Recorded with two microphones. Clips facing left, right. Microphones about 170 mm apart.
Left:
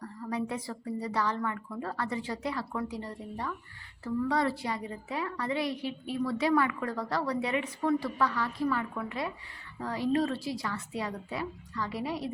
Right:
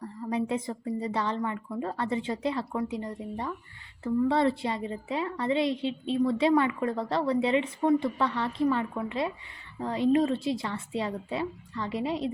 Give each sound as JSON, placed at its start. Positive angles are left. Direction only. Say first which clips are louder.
{"t": 0.0, "sound": "a woman's voice", "louder": "right 4 dB", "side_deg": -25}